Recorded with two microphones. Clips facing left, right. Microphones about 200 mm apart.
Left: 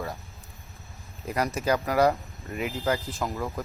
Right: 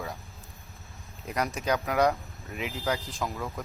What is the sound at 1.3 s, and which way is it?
Speech, 5° left (ahead or behind).